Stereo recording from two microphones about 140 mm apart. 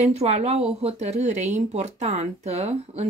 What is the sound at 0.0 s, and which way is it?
Speech, 50° right (ahead or behind).